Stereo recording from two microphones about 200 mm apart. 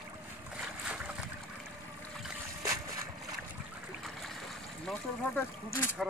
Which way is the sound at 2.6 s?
15° right (ahead or behind).